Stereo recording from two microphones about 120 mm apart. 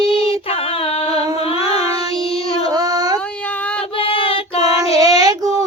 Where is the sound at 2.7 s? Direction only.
30° right (ahead or behind).